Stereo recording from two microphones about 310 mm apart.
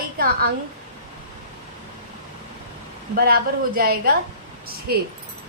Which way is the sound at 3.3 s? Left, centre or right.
Right.